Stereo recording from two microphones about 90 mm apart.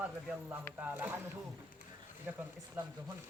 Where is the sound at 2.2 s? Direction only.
20° right (ahead or behind).